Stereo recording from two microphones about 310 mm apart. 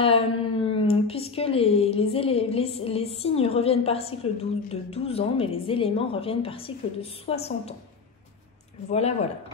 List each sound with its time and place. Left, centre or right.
0.0 s speech: centre